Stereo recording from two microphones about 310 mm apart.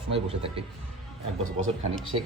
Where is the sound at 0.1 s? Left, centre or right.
Centre.